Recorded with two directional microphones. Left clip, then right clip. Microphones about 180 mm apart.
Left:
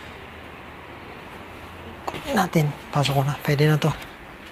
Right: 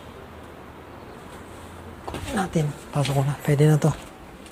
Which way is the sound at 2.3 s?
20° left (ahead or behind).